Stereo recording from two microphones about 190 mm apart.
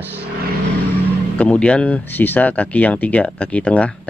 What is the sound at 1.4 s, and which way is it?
Speech, 5° left (ahead or behind).